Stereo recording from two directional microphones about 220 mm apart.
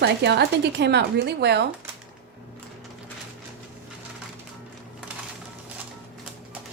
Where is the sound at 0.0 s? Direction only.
50° right (ahead or behind).